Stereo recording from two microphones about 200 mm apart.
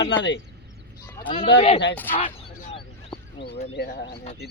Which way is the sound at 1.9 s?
10° left (ahead or behind).